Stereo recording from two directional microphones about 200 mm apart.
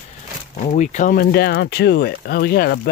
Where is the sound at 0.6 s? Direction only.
35° left (ahead or behind).